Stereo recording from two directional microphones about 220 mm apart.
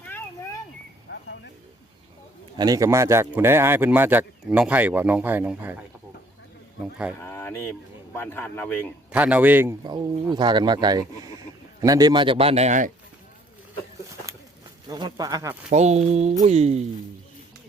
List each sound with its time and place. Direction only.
2.6 s speech: 15° right (ahead or behind)
7.2 s a man's voice: 10° left (ahead or behind)
9.1 s speech: 5° right (ahead or behind); by 12.9 s 35° right (ahead or behind)
14.8 s speech: 15° right (ahead or behind)
15.7 s speech: 30° right (ahead or behind)